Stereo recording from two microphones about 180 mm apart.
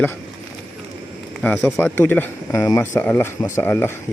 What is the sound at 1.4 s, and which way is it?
A man's voice, 15° left (ahead or behind).